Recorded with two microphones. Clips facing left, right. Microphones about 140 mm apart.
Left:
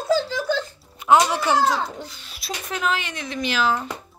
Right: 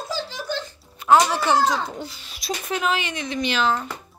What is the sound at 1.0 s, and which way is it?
A child's voice, 10° left (ahead or behind).